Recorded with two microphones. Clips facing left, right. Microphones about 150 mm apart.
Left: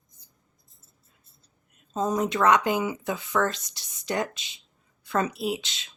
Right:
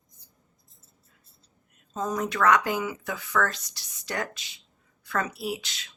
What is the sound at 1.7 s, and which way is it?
Speech, 20° left (ahead or behind).